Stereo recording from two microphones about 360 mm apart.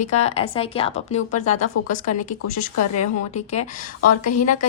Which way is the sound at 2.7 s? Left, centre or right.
Left.